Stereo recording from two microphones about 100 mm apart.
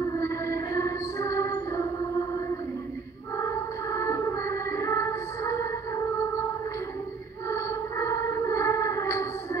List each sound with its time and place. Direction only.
0.2 s music: 30° left (ahead or behind)
3.3 s music: 30° left (ahead or behind)
7.4 s a sound: 30° left (ahead or behind)